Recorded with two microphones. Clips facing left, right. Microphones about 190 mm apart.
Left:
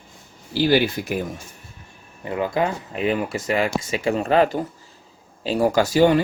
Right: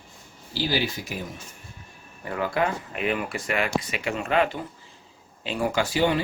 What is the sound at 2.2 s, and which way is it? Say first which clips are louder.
Speech: left 3 dB; 20° left (ahead or behind).